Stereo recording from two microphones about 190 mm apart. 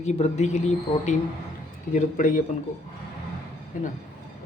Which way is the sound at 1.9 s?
40° left (ahead or behind).